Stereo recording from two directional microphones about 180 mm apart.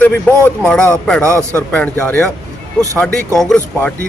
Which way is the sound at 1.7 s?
10° left (ahead or behind).